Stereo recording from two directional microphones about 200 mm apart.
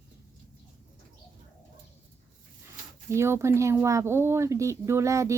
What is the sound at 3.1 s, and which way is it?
Speech, 15° right (ahead or behind).